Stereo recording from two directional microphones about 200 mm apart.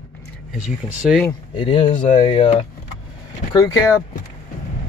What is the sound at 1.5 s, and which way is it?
Speech, 25° left (ahead or behind).